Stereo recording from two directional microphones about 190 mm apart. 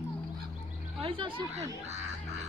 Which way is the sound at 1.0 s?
25° right (ahead or behind).